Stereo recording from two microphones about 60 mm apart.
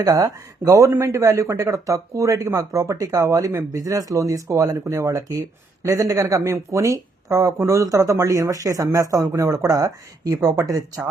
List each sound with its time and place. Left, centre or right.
0.0 s speech: right
0.9 s speech: right